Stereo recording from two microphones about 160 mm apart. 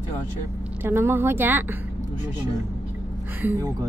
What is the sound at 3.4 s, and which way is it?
Speech, 15° right (ahead or behind).